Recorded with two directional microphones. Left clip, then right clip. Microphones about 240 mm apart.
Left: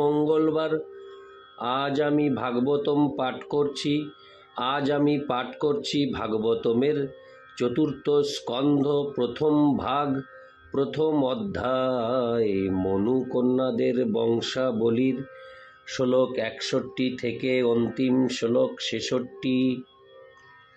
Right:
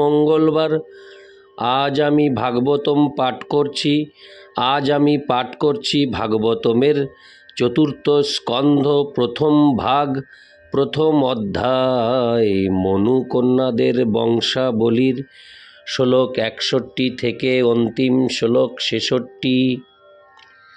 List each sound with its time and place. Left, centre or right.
0.0 s speech: right